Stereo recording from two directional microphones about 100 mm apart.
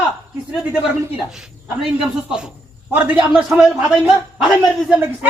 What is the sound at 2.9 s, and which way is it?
Speech, 15° right (ahead or behind).